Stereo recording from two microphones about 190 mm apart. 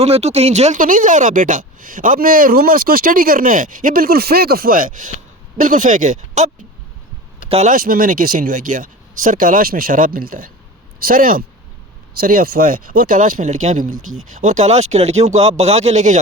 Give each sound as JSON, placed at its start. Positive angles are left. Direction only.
{"t": 0.0, "sound": "speech", "side_deg": -35}
{"t": 7.5, "sound": "speech", "side_deg": -40}